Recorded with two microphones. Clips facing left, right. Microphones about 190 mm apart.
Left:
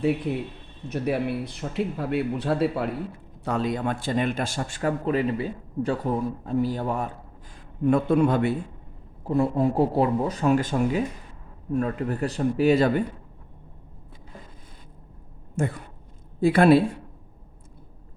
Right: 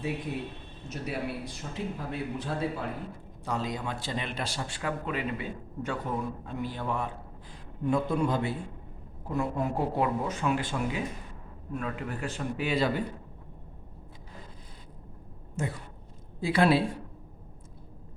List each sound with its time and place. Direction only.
0.9 s speech: 65° left (ahead or behind)
3.4 s speech: 60° left (ahead or behind); by 7.1 s 40° left (ahead or behind)
7.9 s a man's voice: 60° left (ahead or behind)
9.2 s a man's voice: 30° left (ahead or behind); by 13.0 s 50° left (ahead or behind)
15.6 s speech: 50° left (ahead or behind)